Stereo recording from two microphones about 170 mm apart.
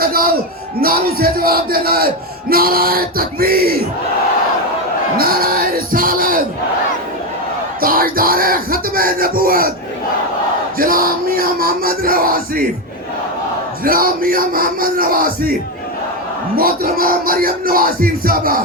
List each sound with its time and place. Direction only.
0.0 s a sound: 60° right (ahead or behind)
0.8 s speech: 60° right (ahead or behind)
5.1 s speech: 60° right (ahead or behind)
7.8 s speech: 60° right (ahead or behind)
10.8 s speech: 60° right (ahead or behind)
13.8 s speech: 60° right (ahead or behind)
16.6 s speech: 60° right (ahead or behind)